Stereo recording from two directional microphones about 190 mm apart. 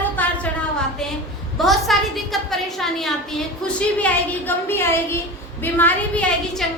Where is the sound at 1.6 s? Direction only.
Centre (ahead or behind).